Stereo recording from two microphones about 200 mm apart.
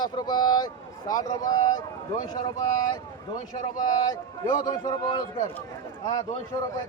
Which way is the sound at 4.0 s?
20° left (ahead or behind).